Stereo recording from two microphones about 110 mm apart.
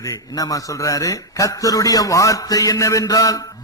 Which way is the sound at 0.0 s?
35° left (ahead or behind).